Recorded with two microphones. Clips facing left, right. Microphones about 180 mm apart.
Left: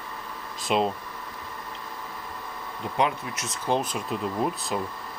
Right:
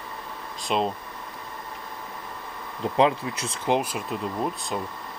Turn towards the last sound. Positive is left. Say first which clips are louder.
# left 1 dB
turn(degrees=5)  # may be behind; listen again after turning